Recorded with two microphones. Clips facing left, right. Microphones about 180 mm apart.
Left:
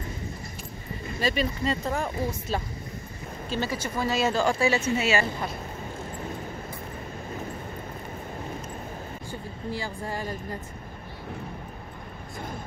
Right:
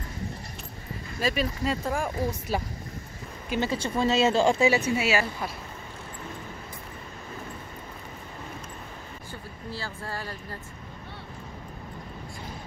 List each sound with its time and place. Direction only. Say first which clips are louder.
1.2 s speech: left 1 dB; 5° right (ahead or behind); by 4.6 s 25° right (ahead or behind)
4.6 s a woman's voice: right 1 dB; 15° right (ahead or behind)
9.3 s speech: left 5 dB; 15° left (ahead or behind)